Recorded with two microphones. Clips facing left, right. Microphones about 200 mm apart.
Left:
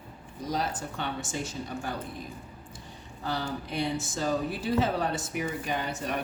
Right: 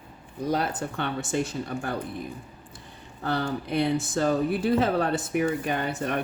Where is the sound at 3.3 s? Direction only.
60° right (ahead or behind).